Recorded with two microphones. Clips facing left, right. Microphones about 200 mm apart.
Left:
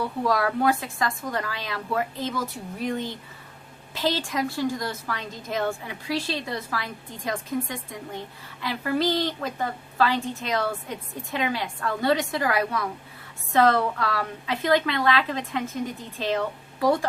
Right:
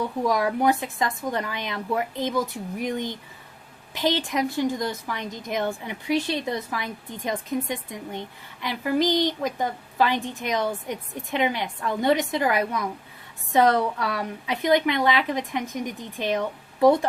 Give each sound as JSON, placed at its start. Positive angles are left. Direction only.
{"t": 0.3, "sound": "a woman's voice", "side_deg": -15}